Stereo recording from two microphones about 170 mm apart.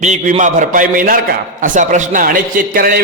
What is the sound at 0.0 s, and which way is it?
A man's voice, 45° right (ahead or behind).